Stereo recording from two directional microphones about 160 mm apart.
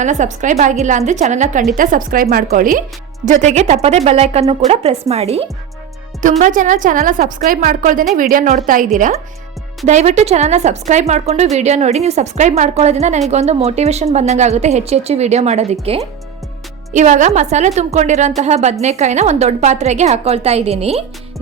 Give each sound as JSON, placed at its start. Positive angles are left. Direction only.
{"t": 0.0, "sound": "a woman's voice", "side_deg": -50}
{"t": 3.2, "sound": "a woman's voice", "side_deg": -45}
{"t": 6.4, "sound": "a woman's voice", "side_deg": -55}